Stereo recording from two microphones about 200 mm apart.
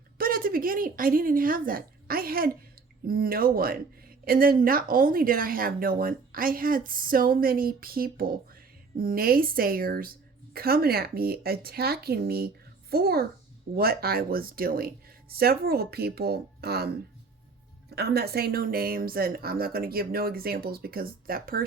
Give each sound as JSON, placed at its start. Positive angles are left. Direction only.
{"t": 0.2, "sound": "a woman's voice", "side_deg": -45}
{"t": 17.9, "sound": "speech", "side_deg": -50}